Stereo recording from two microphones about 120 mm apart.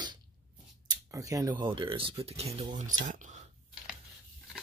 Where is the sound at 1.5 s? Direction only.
40° right (ahead or behind); by 3.4 s 90° right.